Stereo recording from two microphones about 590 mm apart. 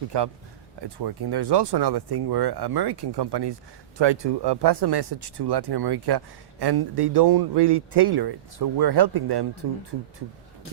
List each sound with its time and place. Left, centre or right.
0.1 s speech: right